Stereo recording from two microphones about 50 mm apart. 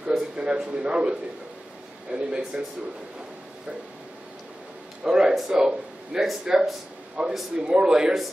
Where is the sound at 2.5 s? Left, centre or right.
Centre.